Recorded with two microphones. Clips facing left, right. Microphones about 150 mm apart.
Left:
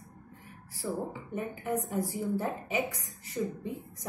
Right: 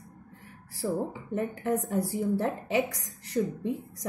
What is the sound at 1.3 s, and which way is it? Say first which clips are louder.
A woman's voice: right 4 dB; 80° right.